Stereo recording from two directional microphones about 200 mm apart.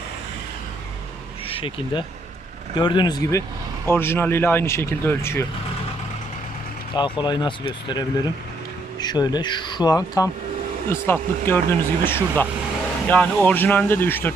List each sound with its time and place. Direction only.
1.5 s speech: 25° left (ahead or behind)
6.9 s speech: 20° left (ahead or behind)